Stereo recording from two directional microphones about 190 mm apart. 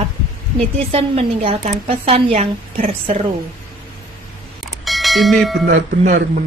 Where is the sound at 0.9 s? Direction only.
30° right (ahead or behind).